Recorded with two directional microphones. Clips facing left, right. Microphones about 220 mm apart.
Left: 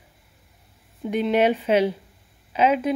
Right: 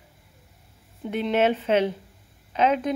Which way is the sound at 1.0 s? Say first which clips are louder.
Left 2 dB; 10° left (ahead or behind).